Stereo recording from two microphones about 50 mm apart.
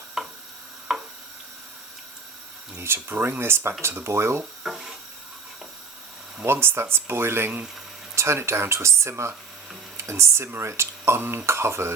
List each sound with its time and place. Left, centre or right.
0.2 s a sound: centre
2.7 s speech: right
4.6 s stir: centre
6.4 s speech: right
8.1 s speech: right